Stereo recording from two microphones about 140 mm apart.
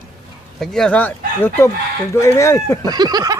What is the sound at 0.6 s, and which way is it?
Speech, 5° left (ahead or behind).